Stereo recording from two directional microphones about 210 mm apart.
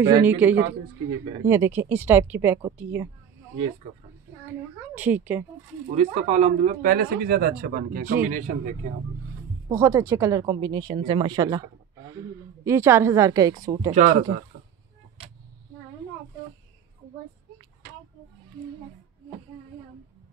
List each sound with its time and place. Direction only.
0.0 s speech: 10° right (ahead or behind)
4.9 s speech: 10° right (ahead or behind)
5.9 s speech: 30° right (ahead or behind)
9.7 s speech: 15° right (ahead or behind)
13.9 s speech: 35° right (ahead or behind)